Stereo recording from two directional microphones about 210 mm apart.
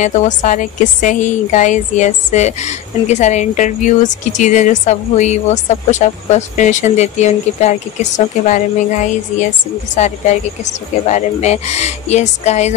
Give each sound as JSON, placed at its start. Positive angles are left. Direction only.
{"t": 0.0, "sound": "a woman's voice", "side_deg": 35}